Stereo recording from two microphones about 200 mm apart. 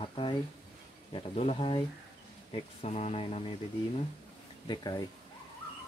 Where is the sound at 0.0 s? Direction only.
25° left (ahead or behind).